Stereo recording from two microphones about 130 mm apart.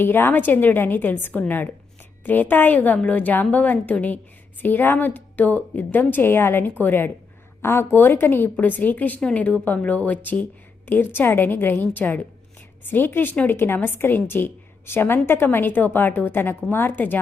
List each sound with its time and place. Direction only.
0.0 s a woman's voice: 15° left (ahead or behind)